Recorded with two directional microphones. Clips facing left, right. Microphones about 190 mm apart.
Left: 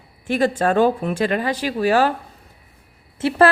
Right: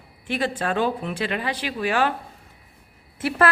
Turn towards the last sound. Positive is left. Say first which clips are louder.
# left 5 dB
turn(degrees=30)  # may be behind; listen again after turning